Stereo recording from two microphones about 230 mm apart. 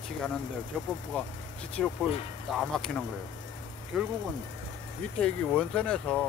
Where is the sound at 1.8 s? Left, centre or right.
Centre.